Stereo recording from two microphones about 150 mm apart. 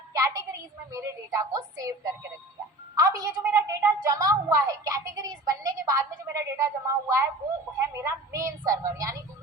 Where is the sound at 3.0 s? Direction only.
20° right (ahead or behind).